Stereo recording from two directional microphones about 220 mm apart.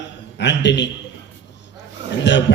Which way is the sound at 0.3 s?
50° left (ahead or behind).